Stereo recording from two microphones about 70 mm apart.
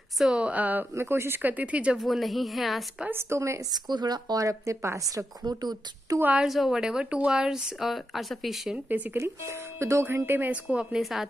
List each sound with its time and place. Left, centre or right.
0.2 s speech: centre
0.9 s speech: right
1.4 s speech: right
2.0 s speech: centre
3.1 s speech: right
3.7 s speech: right
4.4 s a woman's voice: right
6.4 s a woman's voice: centre
8.7 s speech: right
9.2 s speech: right
10.5 s a woman's voice: centre
11.0 s speech: centre